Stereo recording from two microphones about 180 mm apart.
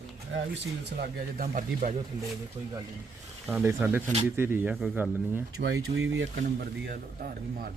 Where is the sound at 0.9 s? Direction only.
60° right (ahead or behind).